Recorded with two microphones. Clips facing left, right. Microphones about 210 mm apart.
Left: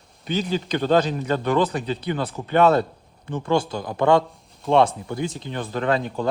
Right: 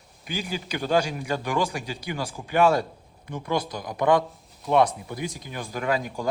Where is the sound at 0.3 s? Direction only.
10° right (ahead or behind).